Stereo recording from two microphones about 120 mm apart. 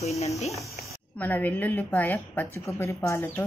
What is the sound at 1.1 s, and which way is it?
A woman's voice, 15° left (ahead or behind).